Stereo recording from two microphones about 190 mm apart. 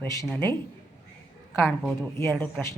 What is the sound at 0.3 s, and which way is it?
Speech, 10° left (ahead or behind).